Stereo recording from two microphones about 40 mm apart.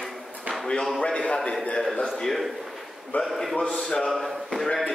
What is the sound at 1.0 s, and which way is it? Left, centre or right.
Speech, left.